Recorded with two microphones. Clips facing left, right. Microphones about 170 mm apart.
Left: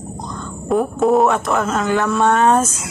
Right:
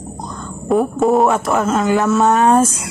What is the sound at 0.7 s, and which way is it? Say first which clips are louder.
Speech: right 1 dB; centre (ahead or behind).